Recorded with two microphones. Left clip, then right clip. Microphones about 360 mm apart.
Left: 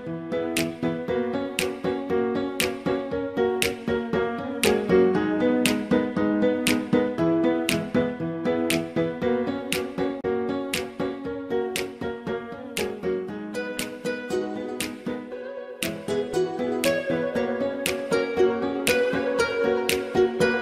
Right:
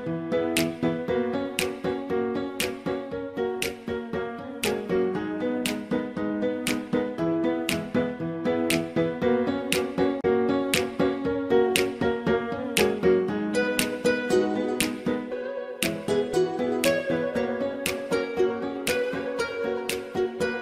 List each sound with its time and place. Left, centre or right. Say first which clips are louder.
0.3 s music: right 1 dB; centre
0.8 s music: even; centre
1.9 s music: left 4 dB; left
2.9 s music: left 4 dB; left
8.5 s music: even; centre; by 14.9 s right
15.8 s music: right 1 dB; centre
16.6 s music: even; centre
18.1 s music: left 4 dB; left